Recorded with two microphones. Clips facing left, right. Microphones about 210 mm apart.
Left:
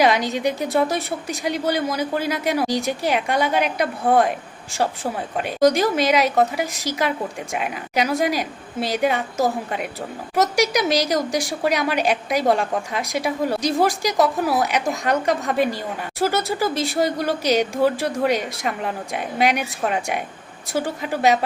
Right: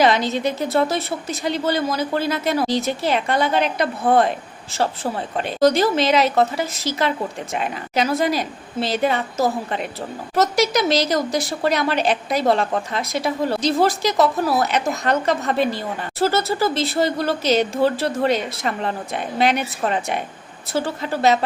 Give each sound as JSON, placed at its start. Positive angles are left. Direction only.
{"t": 0.0, "sound": "a woman's voice", "side_deg": 15}